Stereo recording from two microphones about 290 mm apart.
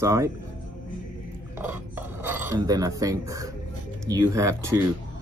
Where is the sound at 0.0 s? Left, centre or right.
Centre.